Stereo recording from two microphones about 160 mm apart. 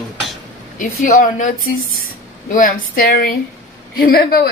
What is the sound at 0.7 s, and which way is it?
A woman's voice, 55° left (ahead or behind).